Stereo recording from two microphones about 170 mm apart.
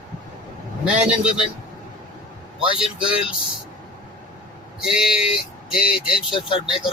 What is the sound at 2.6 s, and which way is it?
Speech, 5° right (ahead or behind).